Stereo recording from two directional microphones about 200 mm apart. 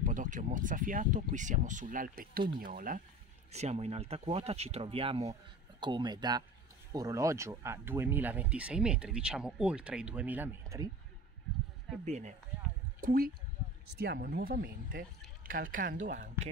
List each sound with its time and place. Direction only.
0.0 s speech: 40° right (ahead or behind); by 10.9 s 10° right (ahead or behind)
12.0 s speech: 35° right (ahead or behind)
13.0 s speech: 45° right (ahead or behind)